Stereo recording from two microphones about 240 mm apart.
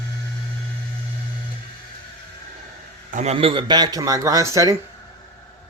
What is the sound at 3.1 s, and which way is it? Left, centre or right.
A man's voice, right.